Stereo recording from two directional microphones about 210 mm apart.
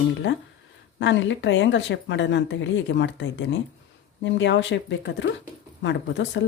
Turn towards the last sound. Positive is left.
turn(degrees=55)  # may be behind; listen again after turning